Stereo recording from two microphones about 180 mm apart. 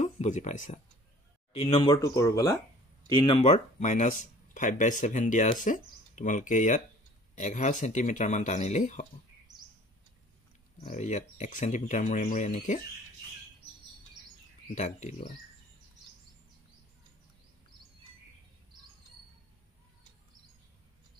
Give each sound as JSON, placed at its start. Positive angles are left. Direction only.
{"t": 0.0, "sound": "speech", "side_deg": 40}
{"t": 2.0, "sound": "speech", "side_deg": 20}
{"t": 3.2, "sound": "speech", "side_deg": 30}
{"t": 10.8, "sound": "speech", "side_deg": 40}
{"t": 14.8, "sound": "speech", "side_deg": 40}